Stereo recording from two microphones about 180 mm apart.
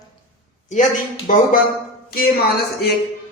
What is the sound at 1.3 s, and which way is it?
Speech, 45° left (ahead or behind).